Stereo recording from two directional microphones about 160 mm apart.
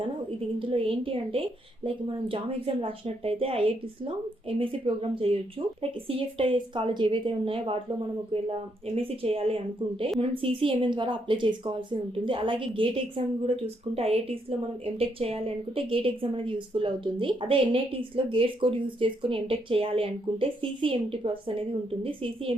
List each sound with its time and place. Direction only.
0.6 s a woman's voice: 35° right (ahead or behind)